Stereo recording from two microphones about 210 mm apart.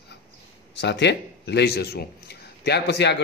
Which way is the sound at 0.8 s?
55° left (ahead or behind).